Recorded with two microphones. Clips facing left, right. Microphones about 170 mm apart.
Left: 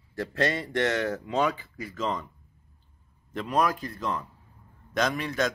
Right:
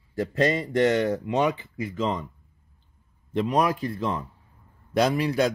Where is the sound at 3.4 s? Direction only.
25° right (ahead or behind).